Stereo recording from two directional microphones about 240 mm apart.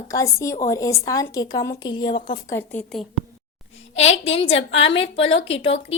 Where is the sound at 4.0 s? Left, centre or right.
Left.